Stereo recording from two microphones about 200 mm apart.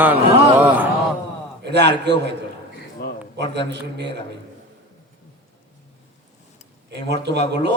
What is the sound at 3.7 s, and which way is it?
Speech, 60° right (ahead or behind).